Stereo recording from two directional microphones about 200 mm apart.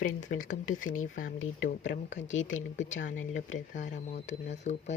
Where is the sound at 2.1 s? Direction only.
65° left (ahead or behind).